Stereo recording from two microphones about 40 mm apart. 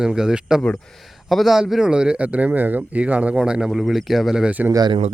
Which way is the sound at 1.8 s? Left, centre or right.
Right.